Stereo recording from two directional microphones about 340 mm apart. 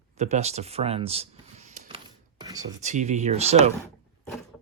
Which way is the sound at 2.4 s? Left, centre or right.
Centre.